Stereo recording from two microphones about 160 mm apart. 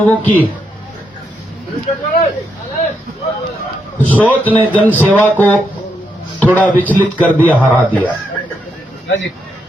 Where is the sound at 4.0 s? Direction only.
10° left (ahead or behind).